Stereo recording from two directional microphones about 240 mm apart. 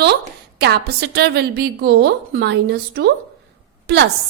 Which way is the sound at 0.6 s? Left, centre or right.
Right.